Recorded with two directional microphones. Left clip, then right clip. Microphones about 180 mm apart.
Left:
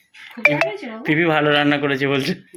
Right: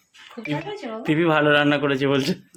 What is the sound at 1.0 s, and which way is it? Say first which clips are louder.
A man's voice: left 2 dB; 15° right (ahead or behind).